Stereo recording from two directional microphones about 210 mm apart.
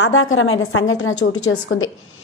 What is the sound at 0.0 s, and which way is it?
A woman's voice, 75° left (ahead or behind).